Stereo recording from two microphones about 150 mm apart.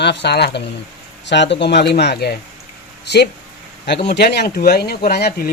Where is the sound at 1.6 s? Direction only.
90° left.